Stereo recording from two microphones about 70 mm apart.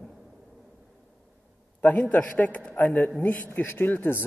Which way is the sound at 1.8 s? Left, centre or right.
Left.